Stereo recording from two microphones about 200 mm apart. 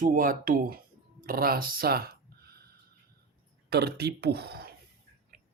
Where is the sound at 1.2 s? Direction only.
45° right (ahead or behind).